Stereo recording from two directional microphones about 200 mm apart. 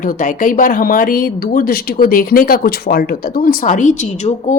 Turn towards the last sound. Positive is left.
turn(degrees=40)  # may be behind; listen again after turning